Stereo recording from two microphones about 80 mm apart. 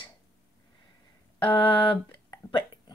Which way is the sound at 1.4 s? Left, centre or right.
Left.